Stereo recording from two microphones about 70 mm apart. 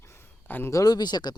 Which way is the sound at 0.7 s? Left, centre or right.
Left.